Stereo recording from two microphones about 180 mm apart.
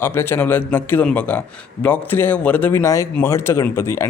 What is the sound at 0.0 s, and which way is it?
A man's voice, 15° left (ahead or behind).